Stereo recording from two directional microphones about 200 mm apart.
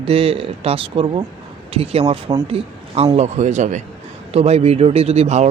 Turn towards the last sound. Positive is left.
turn(degrees=-35)  # may be behind; listen again after turning